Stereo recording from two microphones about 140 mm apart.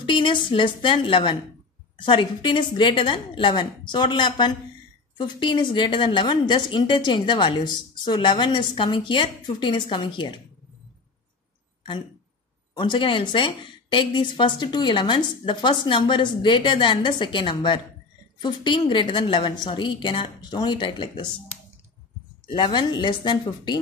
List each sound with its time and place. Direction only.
0.0 s a woman's voice: 35° left (ahead or behind)
12.7 s a woman's voice: 35° left (ahead or behind)
22.6 s a woman's voice: 35° left (ahead or behind)